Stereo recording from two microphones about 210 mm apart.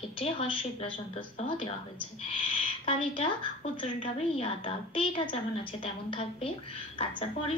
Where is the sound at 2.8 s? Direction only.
30° left (ahead or behind).